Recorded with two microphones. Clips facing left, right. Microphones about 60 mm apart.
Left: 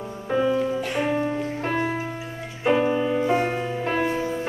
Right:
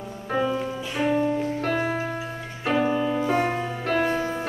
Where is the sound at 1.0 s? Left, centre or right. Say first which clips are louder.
Right 5 dB; centre.